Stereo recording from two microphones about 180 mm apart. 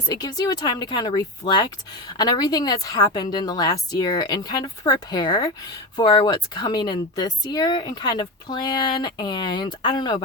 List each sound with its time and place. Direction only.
0.1 s speech: 20° left (ahead or behind)